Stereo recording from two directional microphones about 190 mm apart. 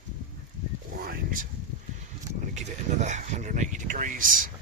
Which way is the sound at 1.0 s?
50° right (ahead or behind).